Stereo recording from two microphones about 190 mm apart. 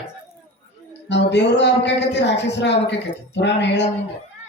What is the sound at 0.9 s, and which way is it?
A woman's voice, 65° left (ahead or behind).